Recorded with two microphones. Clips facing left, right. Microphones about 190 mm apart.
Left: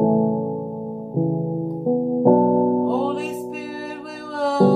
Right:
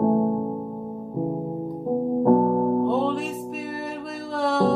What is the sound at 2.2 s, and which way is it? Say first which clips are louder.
Music: left 4 dB; 30° left (ahead or behind).